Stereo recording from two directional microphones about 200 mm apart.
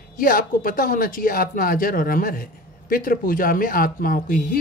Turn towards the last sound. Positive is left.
turn(degrees=45)  # may be behind; listen again after turning